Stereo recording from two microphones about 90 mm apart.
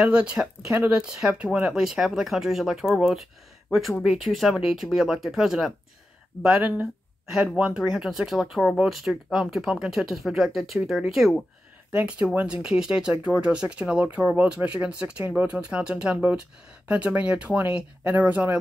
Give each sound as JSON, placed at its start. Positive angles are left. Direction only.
{"t": 0.0, "sound": "speech", "side_deg": -10}
{"t": 11.9, "sound": "speech", "side_deg": -15}
{"t": 12.6, "sound": "speech", "side_deg": -5}